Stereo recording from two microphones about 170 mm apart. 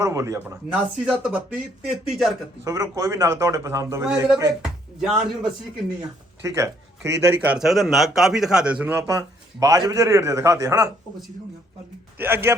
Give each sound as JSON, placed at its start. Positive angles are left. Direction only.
{"t": 0.0, "sound": "speech", "side_deg": -15}
{"t": 2.6, "sound": "speech", "side_deg": -20}
{"t": 4.6, "sound": "speech", "side_deg": -5}
{"t": 6.6, "sound": "speech", "side_deg": -15}
{"t": 9.0, "sound": "a man's voice", "side_deg": -20}
{"t": 12.1, "sound": "a man's voice", "side_deg": -10}